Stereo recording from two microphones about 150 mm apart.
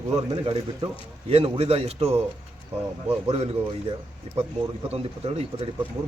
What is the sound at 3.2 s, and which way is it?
A man's voice, 45° right (ahead or behind).